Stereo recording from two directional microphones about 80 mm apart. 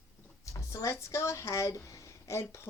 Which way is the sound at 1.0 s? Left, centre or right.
Left.